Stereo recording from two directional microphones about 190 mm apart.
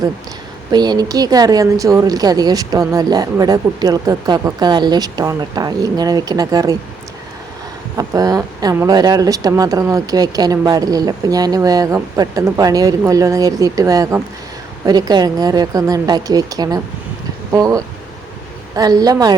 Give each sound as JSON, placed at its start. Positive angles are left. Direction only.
{"t": 0.7, "sound": "speech", "side_deg": -20}
{"t": 7.9, "sound": "speech", "side_deg": -20}